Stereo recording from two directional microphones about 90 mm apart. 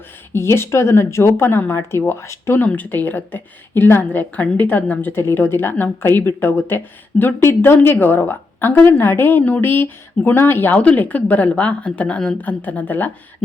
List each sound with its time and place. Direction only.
0.3 s a woman's voice: 30° left (ahead or behind)
2.6 s a woman's voice: 20° left (ahead or behind)